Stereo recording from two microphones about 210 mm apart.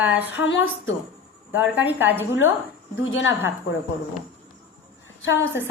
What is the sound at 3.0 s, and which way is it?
Speech, 65° left (ahead or behind).